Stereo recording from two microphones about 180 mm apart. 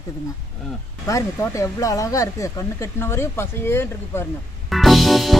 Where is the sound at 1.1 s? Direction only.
15° left (ahead or behind).